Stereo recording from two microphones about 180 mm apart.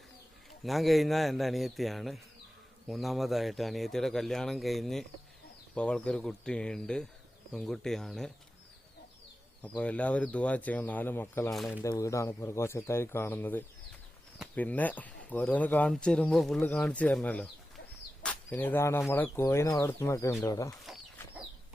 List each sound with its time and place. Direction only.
0.6 s speech: centre (ahead or behind)
9.7 s speech: 5° left (ahead or behind)
11.5 s speech: centre (ahead or behind)
11.8 s speech: 20° left (ahead or behind)